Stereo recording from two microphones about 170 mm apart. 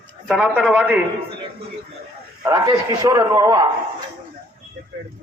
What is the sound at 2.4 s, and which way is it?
A man's voice, 20° right (ahead or behind).